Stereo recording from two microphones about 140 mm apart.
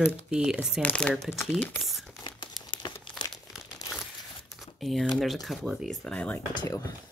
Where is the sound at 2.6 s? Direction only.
35° left (ahead or behind).